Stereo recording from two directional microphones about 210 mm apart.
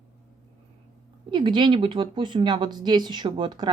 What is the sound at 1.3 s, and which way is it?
Speech, 20° right (ahead or behind).